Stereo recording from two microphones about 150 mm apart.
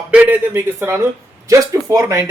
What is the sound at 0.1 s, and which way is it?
A man's voice, 10° right (ahead or behind).